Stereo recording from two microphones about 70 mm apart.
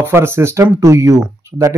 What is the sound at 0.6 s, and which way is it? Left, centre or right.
Speech, right.